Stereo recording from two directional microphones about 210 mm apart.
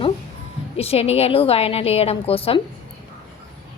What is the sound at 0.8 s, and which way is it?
A woman's voice, 30° left (ahead or behind).